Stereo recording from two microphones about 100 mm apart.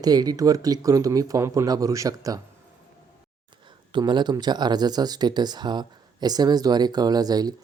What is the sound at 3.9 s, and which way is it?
Speech, 50° right (ahead or behind).